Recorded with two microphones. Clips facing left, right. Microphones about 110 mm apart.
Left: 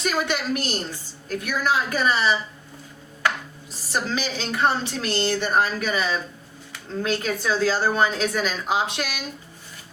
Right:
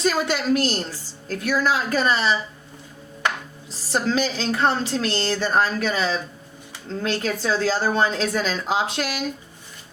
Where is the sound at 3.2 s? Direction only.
30° right (ahead or behind).